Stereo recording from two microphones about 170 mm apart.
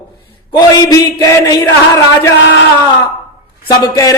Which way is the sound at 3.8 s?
20° left (ahead or behind).